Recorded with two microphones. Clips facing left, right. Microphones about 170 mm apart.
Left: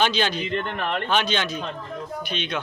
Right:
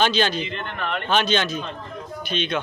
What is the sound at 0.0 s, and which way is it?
Speech, 15° left (ahead or behind).